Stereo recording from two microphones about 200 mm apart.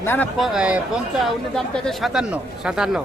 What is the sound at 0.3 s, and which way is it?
A man's voice, centre (ahead or behind).